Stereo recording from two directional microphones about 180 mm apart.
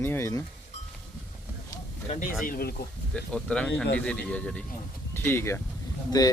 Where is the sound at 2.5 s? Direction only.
60° left (ahead or behind).